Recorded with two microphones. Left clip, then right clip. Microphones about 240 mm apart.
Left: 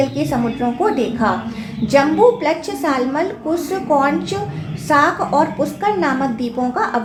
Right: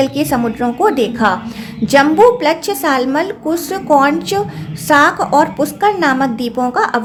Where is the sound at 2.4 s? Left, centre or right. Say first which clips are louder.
Right 4 dB; right.